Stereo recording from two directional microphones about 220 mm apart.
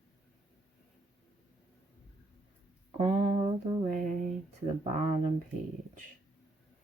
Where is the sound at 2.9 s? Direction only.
30° right (ahead or behind).